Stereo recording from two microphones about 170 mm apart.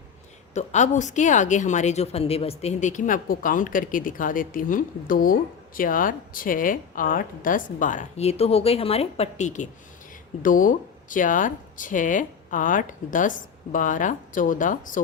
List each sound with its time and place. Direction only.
0.5 s a woman's voice: 45° left (ahead or behind)